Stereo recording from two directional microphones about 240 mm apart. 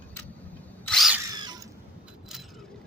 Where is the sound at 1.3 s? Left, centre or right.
Centre.